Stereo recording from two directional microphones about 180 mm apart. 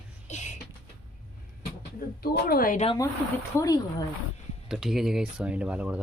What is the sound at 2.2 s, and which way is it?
Speech, 55° left (ahead or behind).